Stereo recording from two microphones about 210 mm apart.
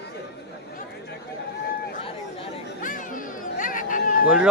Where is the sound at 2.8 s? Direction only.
40° left (ahead or behind).